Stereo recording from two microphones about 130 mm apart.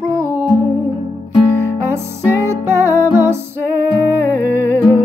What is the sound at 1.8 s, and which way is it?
Music, 20° right (ahead or behind).